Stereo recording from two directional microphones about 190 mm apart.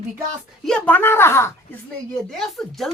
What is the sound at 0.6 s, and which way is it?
Speech, 5° left (ahead or behind).